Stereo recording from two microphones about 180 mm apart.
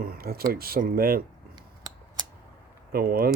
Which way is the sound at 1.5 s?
25° right (ahead or behind).